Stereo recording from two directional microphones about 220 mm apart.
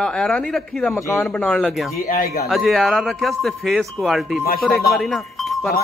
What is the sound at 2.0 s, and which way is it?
Speech, 40° left (ahead or behind).